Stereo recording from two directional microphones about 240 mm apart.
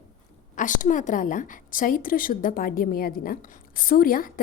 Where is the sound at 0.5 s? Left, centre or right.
Left.